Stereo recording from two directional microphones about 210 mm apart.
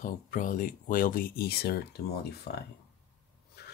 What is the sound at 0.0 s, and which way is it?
Speech, 40° left (ahead or behind).